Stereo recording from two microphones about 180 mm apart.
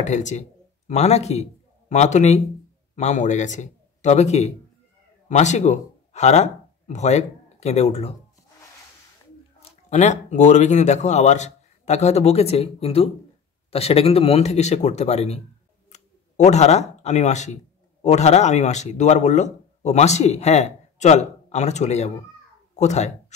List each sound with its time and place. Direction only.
0.0 s a man's voice: 40° left (ahead or behind)
9.6 s speech: 35° left (ahead or behind)